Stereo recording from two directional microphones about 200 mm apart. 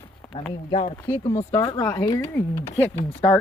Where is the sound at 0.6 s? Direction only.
35° left (ahead or behind).